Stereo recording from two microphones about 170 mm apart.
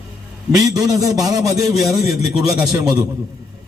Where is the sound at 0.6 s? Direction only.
20° right (ahead or behind).